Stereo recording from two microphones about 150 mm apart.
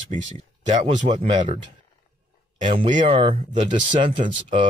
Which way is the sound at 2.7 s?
35° right (ahead or behind).